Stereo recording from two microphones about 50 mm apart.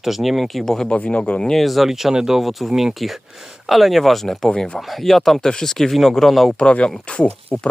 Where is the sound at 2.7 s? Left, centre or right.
Centre.